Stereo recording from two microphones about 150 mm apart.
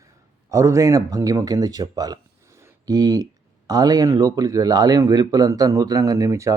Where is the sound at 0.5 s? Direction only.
20° right (ahead or behind).